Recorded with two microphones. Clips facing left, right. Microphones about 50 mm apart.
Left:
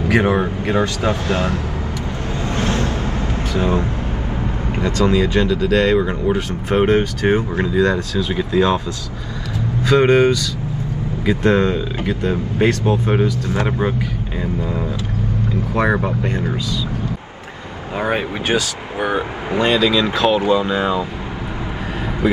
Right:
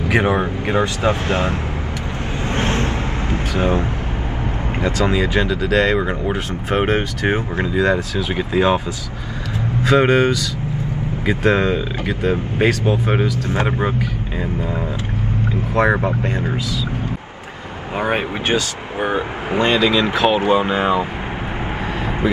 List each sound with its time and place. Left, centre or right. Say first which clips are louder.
0.1 s speech: left 1 dB; right
2.5 s vehicle: even; right
3.5 s speech: even; right
4.8 s speech: left 2 dB; centre
9.8 s speech: left 1 dB; centre
15.9 s speech: right 1 dB; centre
16.3 s speech: even; right
17.9 s speech: even; right